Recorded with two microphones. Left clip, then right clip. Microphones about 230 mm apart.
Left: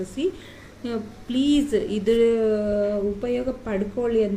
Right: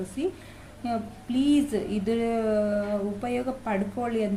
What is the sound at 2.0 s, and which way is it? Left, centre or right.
Speech, centre.